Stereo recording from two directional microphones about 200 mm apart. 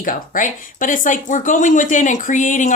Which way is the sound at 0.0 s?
40° left (ahead or behind).